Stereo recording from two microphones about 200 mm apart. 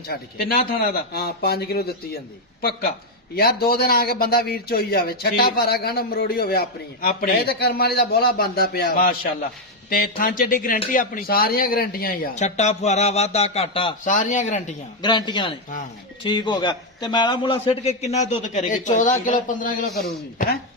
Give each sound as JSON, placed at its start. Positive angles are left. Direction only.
{"t": 0.1, "sound": "a man's voice", "side_deg": 50}
{"t": 15.0, "sound": "a man's voice", "side_deg": 20}